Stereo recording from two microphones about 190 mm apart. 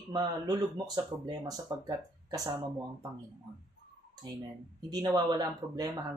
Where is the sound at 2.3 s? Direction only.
20° right (ahead or behind).